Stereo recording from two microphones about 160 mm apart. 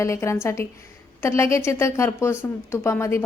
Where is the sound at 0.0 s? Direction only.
20° left (ahead or behind).